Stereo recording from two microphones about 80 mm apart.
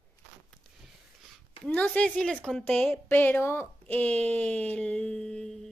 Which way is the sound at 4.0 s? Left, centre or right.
Centre.